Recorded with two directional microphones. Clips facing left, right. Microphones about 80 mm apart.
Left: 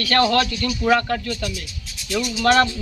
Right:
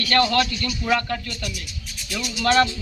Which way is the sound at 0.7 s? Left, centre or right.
Left.